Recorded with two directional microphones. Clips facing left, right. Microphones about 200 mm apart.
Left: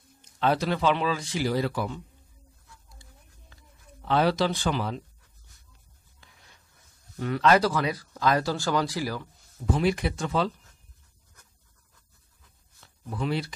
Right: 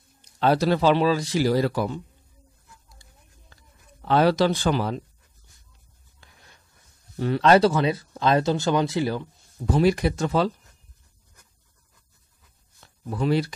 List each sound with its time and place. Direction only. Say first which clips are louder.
0.2 s speech: right 4 dB; 40° right (ahead or behind)
4.1 s speech: right 4 dB; 45° right (ahead or behind)
7.2 s speech: right 4 dB; 30° right (ahead or behind)
9.7 s speech: right 5 dB; 40° right (ahead or behind)
13.2 s speech: right 6 dB; 45° right (ahead or behind)